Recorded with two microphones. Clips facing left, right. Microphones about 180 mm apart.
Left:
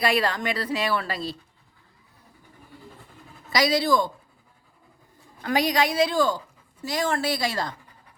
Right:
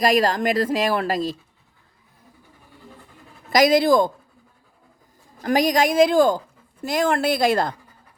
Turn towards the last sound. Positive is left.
turn(degrees=-55)  # may be behind; listen again after turning